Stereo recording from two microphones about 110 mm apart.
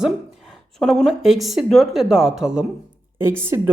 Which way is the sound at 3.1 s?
20° right (ahead or behind).